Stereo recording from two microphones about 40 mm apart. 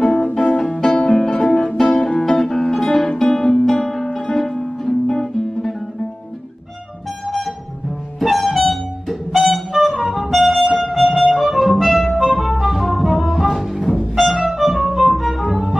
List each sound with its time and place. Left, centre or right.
0.4 s music: centre
2.0 s music: left
2.3 s music: centre
7.2 s a sound: centre
8.2 s music: centre